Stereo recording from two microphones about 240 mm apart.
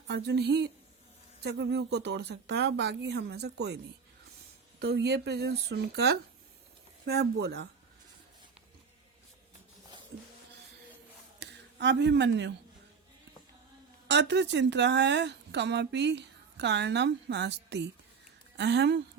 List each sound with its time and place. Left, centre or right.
0.1 s speech: right
4.8 s speech: right
11.3 s speech: right
14.1 s speech: right